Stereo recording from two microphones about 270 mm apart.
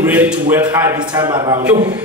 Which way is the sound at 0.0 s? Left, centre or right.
Centre.